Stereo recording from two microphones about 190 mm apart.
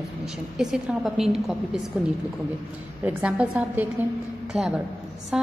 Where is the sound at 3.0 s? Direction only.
5° right (ahead or behind).